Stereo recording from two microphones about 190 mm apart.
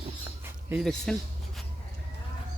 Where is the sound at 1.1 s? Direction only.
5° left (ahead or behind).